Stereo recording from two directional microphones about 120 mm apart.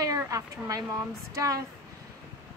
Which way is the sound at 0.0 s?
30° right (ahead or behind).